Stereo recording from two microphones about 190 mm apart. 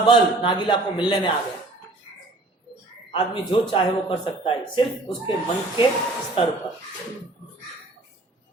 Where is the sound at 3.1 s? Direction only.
25° left (ahead or behind).